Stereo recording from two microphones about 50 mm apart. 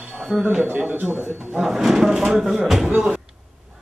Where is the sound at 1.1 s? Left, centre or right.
Right.